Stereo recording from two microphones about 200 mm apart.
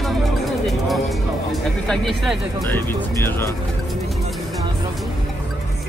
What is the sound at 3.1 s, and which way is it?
Speech, 15° left (ahead or behind).